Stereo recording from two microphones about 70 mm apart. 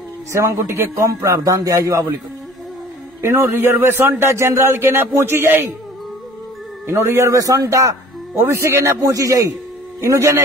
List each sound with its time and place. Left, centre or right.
0.3 s a man's voice: right
3.2 s speech: right
6.9 s speech: right
7.3 s a man's voice: right
9.0 s a man's voice: right
10.0 s speech: right